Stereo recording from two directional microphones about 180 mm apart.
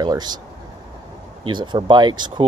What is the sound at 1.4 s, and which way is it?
Speech, 25° right (ahead or behind).